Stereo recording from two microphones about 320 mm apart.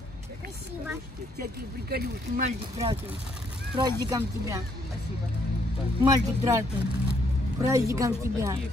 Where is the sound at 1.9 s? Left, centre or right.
Right.